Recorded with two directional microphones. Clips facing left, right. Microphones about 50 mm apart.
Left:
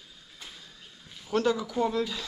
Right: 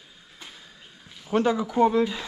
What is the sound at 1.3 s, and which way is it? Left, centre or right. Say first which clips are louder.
Speech: right 4 dB; right.